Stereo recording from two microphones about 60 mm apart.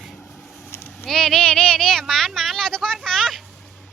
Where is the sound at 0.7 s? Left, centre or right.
Left.